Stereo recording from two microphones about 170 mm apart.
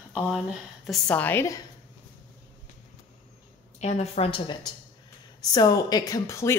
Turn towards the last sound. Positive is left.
turn(degrees=15)  # may be behind; listen again after turning